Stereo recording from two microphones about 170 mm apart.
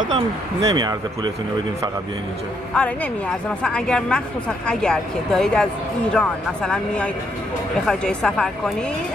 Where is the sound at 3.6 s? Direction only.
5° left (ahead or behind).